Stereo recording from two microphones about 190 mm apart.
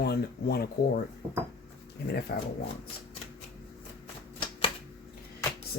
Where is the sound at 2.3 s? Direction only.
55° left (ahead or behind).